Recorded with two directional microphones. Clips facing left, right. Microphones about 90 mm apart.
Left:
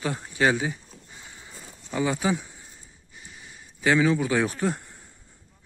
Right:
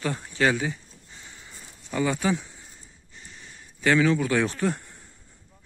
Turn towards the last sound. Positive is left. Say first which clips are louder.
# even
turn(degrees=15)  # may be behind; listen again after turning